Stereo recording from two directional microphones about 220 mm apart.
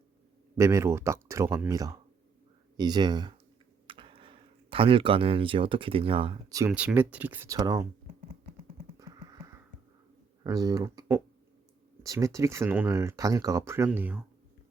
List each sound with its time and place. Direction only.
0.5 s speech: 15° right (ahead or behind)
6.7 s speech: 5° right (ahead or behind)
10.4 s speech: 15° right (ahead or behind)